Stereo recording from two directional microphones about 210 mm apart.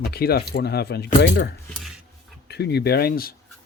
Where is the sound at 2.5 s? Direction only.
50° left (ahead or behind).